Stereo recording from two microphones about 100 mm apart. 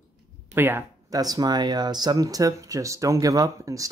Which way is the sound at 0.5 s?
20° right (ahead or behind).